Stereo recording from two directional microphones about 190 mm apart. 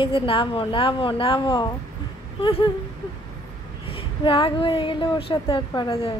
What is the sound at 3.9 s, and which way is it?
A woman's voice, 30° left (ahead or behind).